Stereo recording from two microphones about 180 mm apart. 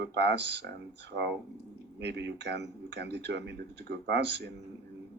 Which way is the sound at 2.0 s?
75° right (ahead or behind).